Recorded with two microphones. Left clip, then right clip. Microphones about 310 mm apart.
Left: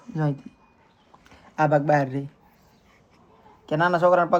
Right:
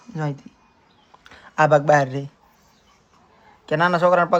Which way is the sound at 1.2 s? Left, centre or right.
Right.